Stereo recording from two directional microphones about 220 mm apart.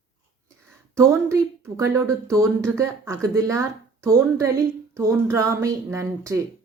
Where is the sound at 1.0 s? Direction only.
15° right (ahead or behind).